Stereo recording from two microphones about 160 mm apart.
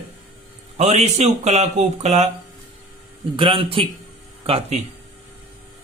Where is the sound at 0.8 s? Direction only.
45° right (ahead or behind).